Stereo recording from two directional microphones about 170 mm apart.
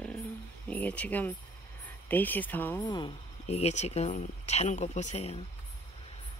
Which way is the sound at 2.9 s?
25° left (ahead or behind).